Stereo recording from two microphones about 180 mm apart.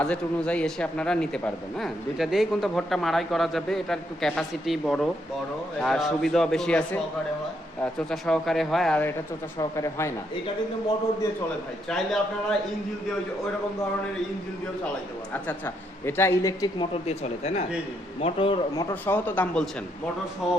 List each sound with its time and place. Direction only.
0.0 s speech: 5° left (ahead or behind)
9.6 s a man's voice: 15° left (ahead or behind)
11.9 s speech: 5° left (ahead or behind)
15.3 s a man's voice: 10° left (ahead or behind)
17.1 s a man's voice: 35° left (ahead or behind)
18.8 s a man's voice: 10° left (ahead or behind)
20.4 s speech: centre (ahead or behind)